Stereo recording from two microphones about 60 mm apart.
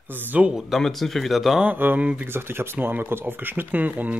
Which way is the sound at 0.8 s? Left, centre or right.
Centre.